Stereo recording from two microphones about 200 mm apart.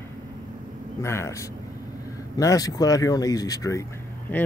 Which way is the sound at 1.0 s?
15° left (ahead or behind).